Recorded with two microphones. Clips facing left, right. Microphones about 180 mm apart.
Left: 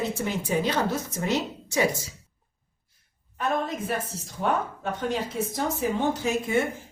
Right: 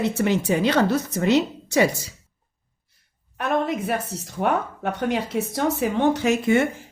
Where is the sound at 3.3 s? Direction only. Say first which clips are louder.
Right 4 dB; 70° right (ahead or behind).